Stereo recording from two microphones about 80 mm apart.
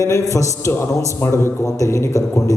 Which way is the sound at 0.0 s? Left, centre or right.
Left.